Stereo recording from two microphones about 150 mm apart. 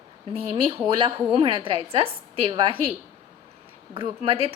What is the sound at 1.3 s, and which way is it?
A woman's voice, 30° right (ahead or behind).